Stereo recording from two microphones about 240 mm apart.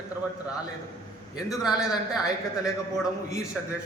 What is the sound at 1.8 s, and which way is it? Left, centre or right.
Speech, centre.